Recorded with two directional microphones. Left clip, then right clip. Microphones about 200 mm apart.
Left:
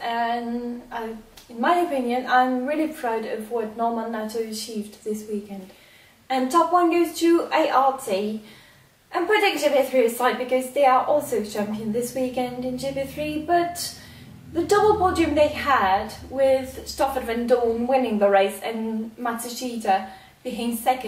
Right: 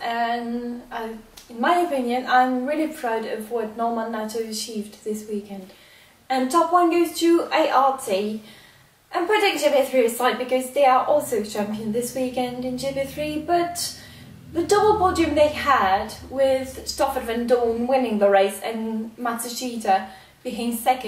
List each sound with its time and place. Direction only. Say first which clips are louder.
0.0 s female singing: right 1 dB; centre (ahead or behind)
0.9 s a sound: right 1 dB; centre (ahead or behind)
1.6 s a woman's voice: right 1 dB; centre (ahead or behind)